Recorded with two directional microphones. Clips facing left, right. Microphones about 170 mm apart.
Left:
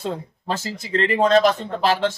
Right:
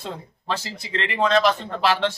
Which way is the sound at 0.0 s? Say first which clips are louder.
Left 6 dB; 45° left (ahead or behind).